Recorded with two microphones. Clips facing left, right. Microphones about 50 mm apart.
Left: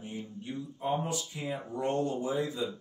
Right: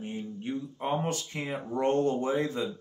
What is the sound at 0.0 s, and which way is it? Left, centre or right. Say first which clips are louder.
Speech: right 5 dB; right.